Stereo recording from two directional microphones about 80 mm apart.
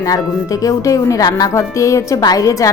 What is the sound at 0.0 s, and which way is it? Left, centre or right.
A woman's voice, left.